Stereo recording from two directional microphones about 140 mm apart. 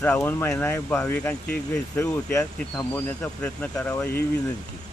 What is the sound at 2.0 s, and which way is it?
Speech, 20° left (ahead or behind).